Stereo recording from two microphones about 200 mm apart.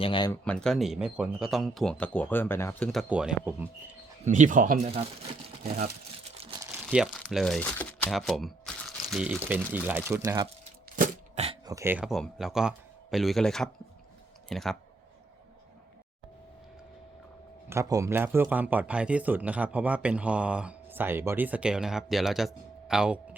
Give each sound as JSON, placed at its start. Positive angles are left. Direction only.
{"t": 0.0, "sound": "speech", "side_deg": 25}
{"t": 0.4, "sound": "speech", "side_deg": 5}
{"t": 4.3, "sound": "speech", "side_deg": -40}
{"t": 4.9, "sound": "speech", "side_deg": -30}
{"t": 6.4, "sound": "crumpling", "side_deg": -20}
{"t": 6.8, "sound": "speech", "side_deg": 0}
{"t": 10.9, "sound": "a sound", "side_deg": -35}
{"t": 11.6, "sound": "speech", "side_deg": -15}
{"t": 17.7, "sound": "a man's voice", "side_deg": -15}